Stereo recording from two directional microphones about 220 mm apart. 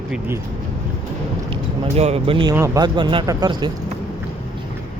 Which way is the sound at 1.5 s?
25° right (ahead or behind).